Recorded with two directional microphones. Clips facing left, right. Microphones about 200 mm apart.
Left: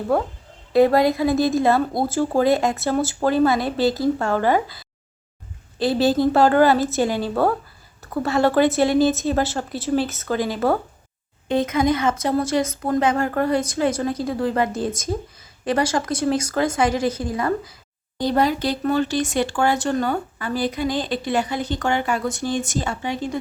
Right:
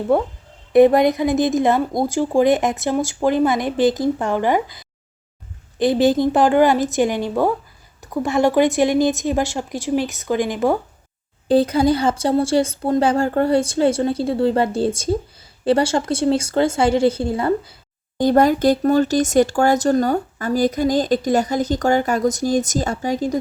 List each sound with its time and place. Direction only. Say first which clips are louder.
0.7 s speech: right 3 dB; 20° right (ahead or behind)
11.4 s speech: right 4 dB; 35° right (ahead or behind)
18.2 s speech: right 5 dB; 50° right (ahead or behind)